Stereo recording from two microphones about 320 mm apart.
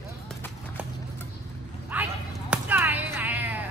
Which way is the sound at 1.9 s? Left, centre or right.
Centre.